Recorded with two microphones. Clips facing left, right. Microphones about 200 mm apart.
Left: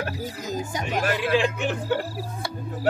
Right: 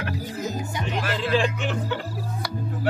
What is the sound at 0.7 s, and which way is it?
Speech, 45° left (ahead or behind).